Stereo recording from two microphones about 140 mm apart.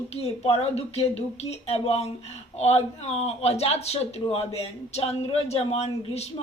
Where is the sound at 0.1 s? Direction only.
45° left (ahead or behind).